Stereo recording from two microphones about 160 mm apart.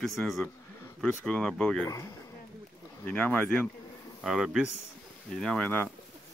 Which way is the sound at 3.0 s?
10° left (ahead or behind).